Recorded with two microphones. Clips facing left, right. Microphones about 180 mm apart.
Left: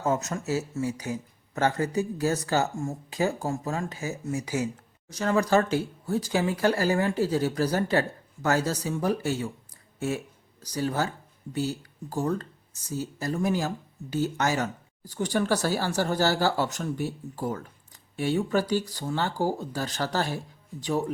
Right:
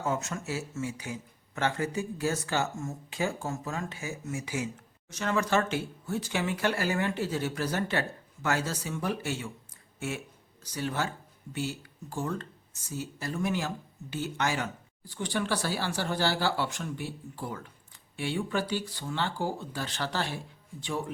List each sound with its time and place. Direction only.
0.0 s speech: 40° left (ahead or behind)